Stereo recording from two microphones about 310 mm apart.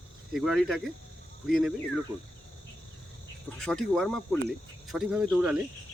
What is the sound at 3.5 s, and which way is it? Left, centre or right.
Speech, centre.